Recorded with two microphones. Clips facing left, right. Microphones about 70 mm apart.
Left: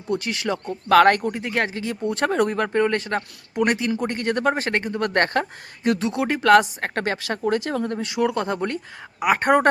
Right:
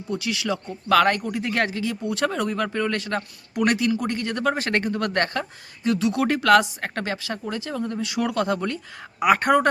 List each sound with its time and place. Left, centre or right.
0.2 s speech: left
1.4 s speech: centre
1.7 s speech: left
4.7 s speech: left
5.1 s speech: left
6.1 s speech: centre
6.6 s speech: left
7.5 s speech: left
7.9 s speech: left
8.2 s speech: left